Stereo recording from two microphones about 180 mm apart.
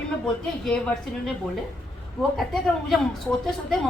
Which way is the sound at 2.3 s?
Centre (ahead or behind).